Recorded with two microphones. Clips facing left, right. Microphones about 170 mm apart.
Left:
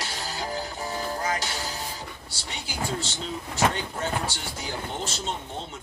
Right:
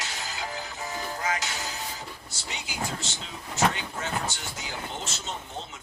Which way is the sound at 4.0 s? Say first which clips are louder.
Left 2 dB; 30° left (ahead or behind).